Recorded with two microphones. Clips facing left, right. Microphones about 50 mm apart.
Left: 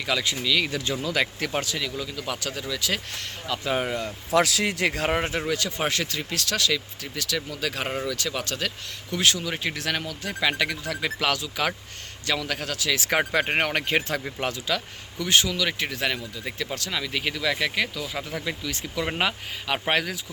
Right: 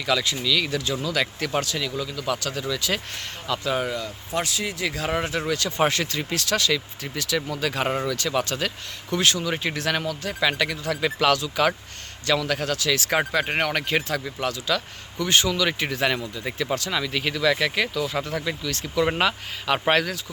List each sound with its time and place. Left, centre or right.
0.0 s speech: centre
3.6 s speech: left
4.3 s speech: left
5.4 s speech: centre
13.4 s speech: centre
15.2 s speech: centre